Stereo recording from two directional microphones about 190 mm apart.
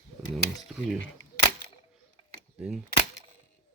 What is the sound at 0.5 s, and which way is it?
Speech, centre (ahead or behind).